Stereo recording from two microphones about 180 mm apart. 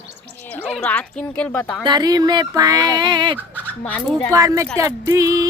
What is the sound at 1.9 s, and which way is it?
Speech, 20° right (ahead or behind).